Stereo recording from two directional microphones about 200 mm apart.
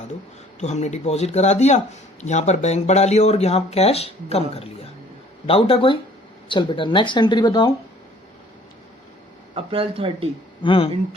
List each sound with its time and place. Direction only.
0.6 s speech: 35° left (ahead or behind)
9.6 s speech: 25° right (ahead or behind)
10.6 s speech: 25° left (ahead or behind)